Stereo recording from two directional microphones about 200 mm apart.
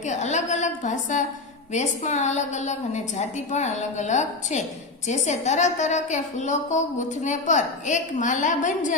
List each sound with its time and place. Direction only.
0.0 s a woman's voice: 35° left (ahead or behind)